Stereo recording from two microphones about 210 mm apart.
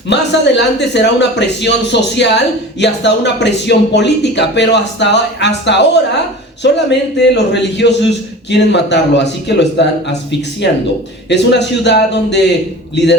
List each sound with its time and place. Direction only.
0.1 s speech: 55° left (ahead or behind)